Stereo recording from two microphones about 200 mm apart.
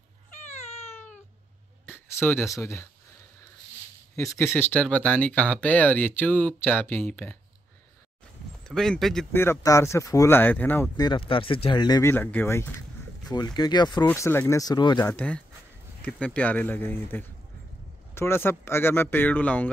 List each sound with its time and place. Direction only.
0.3 s cat: 35° left (ahead or behind)
1.9 s a sound: 10° left (ahead or behind)
2.5 s speech: 15° left (ahead or behind)
4.1 s speech: 15° left (ahead or behind)
8.6 s speech: centre (ahead or behind)
9.4 s speech: 15° left (ahead or behind)
15.1 s speech: 5° left (ahead or behind)